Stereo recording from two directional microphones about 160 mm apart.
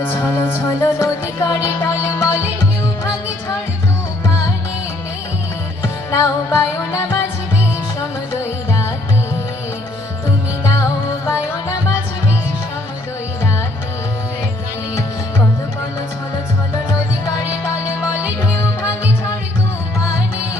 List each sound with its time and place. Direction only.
0.0 s music: 15° left (ahead or behind)
5.8 s music: 15° left (ahead or behind)
18.0 s music: 10° right (ahead or behind)
18.5 s music: 15° left (ahead or behind)